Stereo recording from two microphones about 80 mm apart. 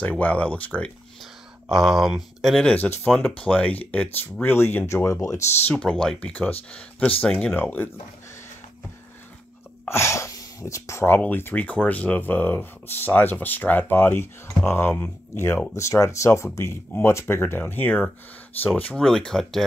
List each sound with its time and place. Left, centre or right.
0.2 s speech: centre
1.7 s speech: centre
2.6 s speech: centre
4.5 s speech: left
5.8 s speech: centre
7.5 s speech: left
9.8 s speech: left
11.1 s speech: left
18.9 s speech: centre